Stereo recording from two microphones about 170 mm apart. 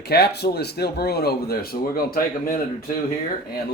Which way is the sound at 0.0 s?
70° left (ahead or behind).